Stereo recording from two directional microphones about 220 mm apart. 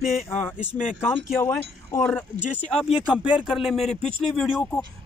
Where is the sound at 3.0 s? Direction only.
5° right (ahead or behind).